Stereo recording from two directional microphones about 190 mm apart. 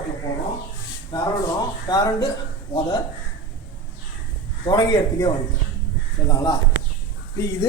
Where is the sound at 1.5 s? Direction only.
20° left (ahead or behind).